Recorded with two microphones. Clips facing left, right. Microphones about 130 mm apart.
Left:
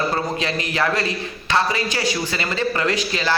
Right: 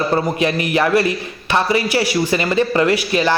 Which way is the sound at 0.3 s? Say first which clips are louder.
Right 6 dB; 15° right (ahead or behind).